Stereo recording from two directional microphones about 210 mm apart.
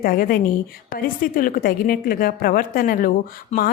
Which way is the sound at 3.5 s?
30° left (ahead or behind).